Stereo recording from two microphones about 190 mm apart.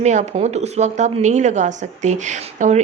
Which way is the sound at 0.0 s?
40° right (ahead or behind).